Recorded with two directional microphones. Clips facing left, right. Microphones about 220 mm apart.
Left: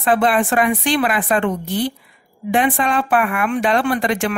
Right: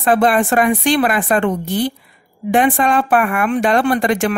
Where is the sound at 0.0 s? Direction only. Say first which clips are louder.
Right 2 dB; 45° right (ahead or behind).